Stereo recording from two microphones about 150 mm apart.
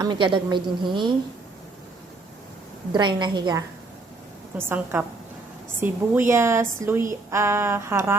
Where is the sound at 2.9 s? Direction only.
30° right (ahead or behind).